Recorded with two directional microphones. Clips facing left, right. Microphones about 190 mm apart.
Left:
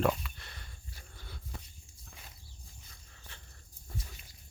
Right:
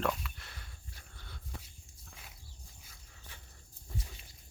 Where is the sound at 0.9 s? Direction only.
10° left (ahead or behind).